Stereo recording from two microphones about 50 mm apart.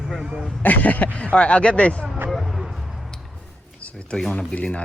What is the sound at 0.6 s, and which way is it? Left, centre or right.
Speech, left.